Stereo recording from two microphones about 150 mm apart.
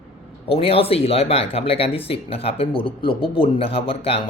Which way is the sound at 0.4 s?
40° left (ahead or behind).